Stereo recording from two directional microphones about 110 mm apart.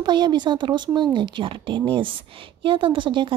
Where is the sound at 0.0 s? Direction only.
45° right (ahead or behind).